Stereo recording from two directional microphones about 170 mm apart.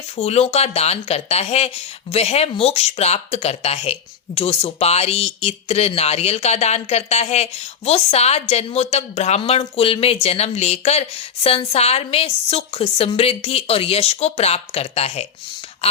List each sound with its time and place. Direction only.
0.2 s speech: 35° left (ahead or behind)